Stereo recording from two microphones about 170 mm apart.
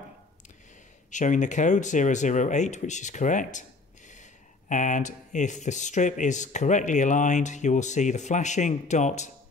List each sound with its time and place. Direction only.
1.1 s speech: 45° left (ahead or behind)